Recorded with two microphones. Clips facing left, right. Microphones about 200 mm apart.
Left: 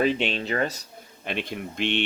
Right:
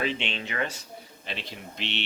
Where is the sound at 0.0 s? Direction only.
45° left (ahead or behind).